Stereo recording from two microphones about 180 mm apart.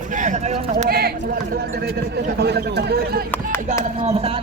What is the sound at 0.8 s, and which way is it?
Speech, 60° right (ahead or behind).